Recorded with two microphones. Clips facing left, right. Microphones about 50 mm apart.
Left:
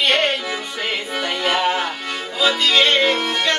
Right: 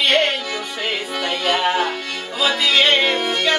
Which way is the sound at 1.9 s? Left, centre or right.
Centre.